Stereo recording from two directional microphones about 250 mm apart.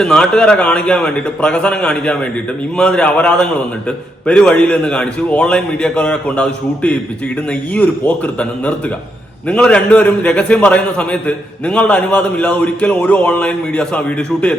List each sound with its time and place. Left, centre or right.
0.0 s a man's voice: centre